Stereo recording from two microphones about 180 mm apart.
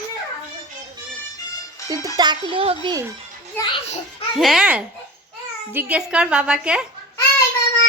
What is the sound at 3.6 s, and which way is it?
Speech, 15° left (ahead or behind).